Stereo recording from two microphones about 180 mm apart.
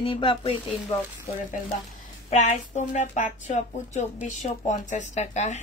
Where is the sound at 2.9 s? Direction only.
40° left (ahead or behind).